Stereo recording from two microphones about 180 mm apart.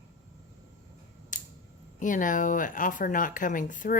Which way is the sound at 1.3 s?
45° left (ahead or behind).